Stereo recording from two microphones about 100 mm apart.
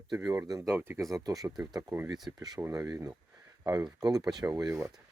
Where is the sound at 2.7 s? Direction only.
35° right (ahead or behind).